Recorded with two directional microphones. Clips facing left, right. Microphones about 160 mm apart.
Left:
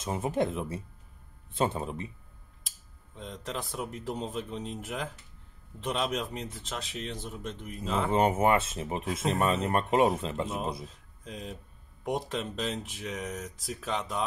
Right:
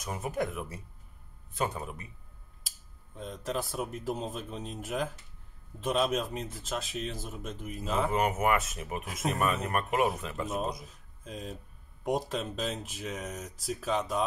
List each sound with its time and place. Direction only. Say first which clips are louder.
0.0 s speech: left 4 dB; 25° left (ahead or behind)
3.2 s speech: right 3 dB; 5° right (ahead or behind)
8.1 s speech: left 5 dB; 30° left (ahead or behind)
11.2 s speech: even; centre (ahead or behind)